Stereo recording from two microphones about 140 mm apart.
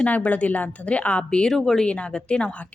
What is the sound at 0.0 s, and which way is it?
Speech, 10° left (ahead or behind).